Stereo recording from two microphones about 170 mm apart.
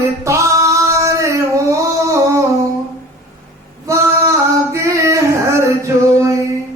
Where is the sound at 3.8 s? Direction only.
15° right (ahead or behind).